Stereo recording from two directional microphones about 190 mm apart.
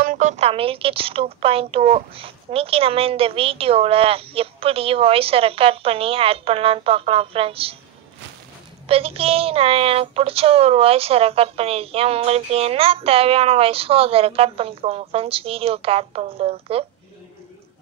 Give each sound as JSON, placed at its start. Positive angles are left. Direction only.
{"t": 0.0, "sound": "a woman's voice", "side_deg": -40}
{"t": 8.8, "sound": "speech", "side_deg": -30}